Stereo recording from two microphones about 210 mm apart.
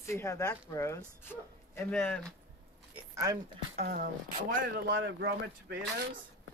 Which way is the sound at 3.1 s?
15° right (ahead or behind).